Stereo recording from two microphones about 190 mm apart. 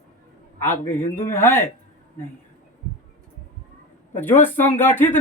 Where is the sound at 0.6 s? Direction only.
10° left (ahead or behind).